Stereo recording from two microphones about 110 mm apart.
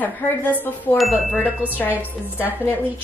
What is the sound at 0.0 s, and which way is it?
Speech, 15° left (ahead or behind).